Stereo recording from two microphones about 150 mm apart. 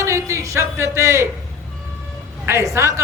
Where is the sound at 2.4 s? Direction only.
20° right (ahead or behind).